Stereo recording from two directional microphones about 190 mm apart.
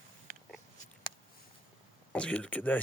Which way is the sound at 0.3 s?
45° right (ahead or behind).